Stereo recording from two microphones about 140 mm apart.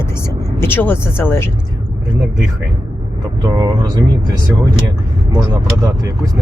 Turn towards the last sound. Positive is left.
turn(degrees=-25)  # may be behind; listen again after turning